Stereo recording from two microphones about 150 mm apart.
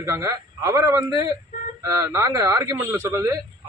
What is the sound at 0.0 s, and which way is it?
A man's voice, 20° right (ahead or behind).